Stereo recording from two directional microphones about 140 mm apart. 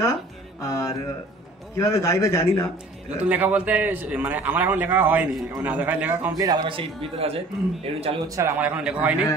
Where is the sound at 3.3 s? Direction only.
10° right (ahead or behind).